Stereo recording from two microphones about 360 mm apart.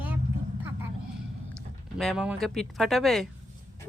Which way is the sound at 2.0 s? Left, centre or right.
Centre.